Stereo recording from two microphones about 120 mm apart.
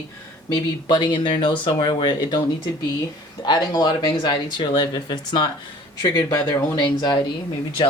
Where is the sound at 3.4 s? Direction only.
35° left (ahead or behind).